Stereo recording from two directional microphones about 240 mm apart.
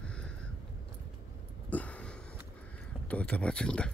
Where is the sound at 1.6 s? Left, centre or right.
Centre.